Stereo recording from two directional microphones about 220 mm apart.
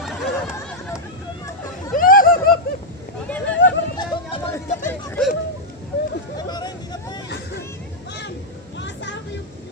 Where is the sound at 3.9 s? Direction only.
20° left (ahead or behind).